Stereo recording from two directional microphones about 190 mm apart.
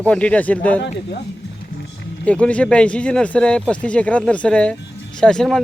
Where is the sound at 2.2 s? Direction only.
5° left (ahead or behind).